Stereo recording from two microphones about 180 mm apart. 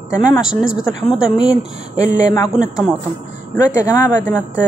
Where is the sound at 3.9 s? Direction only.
20° left (ahead or behind).